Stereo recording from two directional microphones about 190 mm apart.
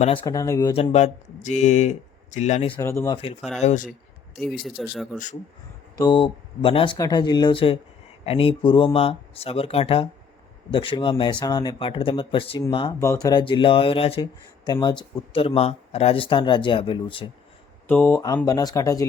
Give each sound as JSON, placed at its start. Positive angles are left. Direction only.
{"t": 0.3, "sound": "speech", "side_deg": 15}
{"t": 0.8, "sound": "speech", "side_deg": 35}
{"t": 2.7, "sound": "speech", "side_deg": 15}
{"t": 3.6, "sound": "speech", "side_deg": 40}
{"t": 4.8, "sound": "speech", "side_deg": 0}
{"t": 5.1, "sound": "speech", "side_deg": 40}
{"t": 6.0, "sound": "speech", "side_deg": 25}
{"t": 17.8, "sound": "speech", "side_deg": 10}